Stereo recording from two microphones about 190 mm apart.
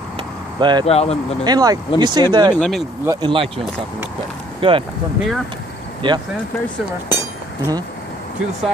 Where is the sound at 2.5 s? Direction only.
5° left (ahead or behind).